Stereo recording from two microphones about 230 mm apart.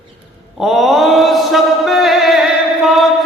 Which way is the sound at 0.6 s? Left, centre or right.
Centre.